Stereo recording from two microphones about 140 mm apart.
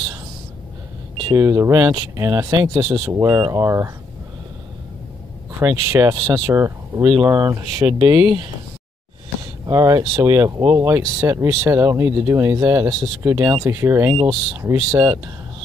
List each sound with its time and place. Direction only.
1.3 s speech: 20° right (ahead or behind)
5.6 s speech: 20° right (ahead or behind)
9.7 s speech: 25° right (ahead or behind)